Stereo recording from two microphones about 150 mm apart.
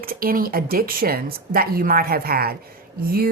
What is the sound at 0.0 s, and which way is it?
A woman's voice, 75° right (ahead or behind).